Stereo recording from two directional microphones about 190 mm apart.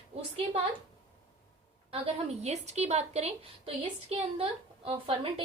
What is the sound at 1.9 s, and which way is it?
A woman's voice, 35° right (ahead or behind).